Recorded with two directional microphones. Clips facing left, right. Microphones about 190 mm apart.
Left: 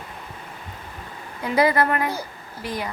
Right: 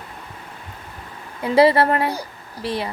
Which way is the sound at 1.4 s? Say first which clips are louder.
Right 5 dB; 30° right (ahead or behind).